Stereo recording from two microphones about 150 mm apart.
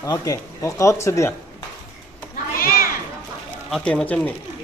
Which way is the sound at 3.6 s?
Centre (ahead or behind).